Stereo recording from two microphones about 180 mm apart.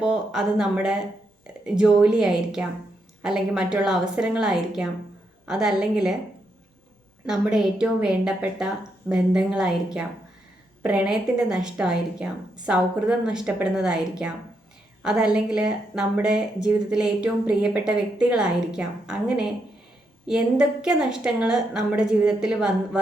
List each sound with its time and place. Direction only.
0.0 s speech: 5° right (ahead or behind)
7.3 s speech: 5° right (ahead or behind)